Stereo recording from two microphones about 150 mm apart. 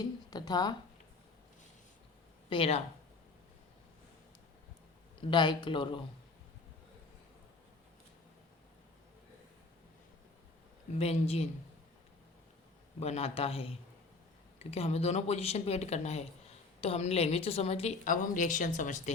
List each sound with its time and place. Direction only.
0.0 s a sound: 25° left (ahead or behind)
2.5 s a woman's voice: 40° left (ahead or behind)
5.3 s a woman's voice: 30° left (ahead or behind)
10.9 s speech: 45° left (ahead or behind)
13.0 s a woman's voice: 45° left (ahead or behind)
18.0 s speech: 60° left (ahead or behind)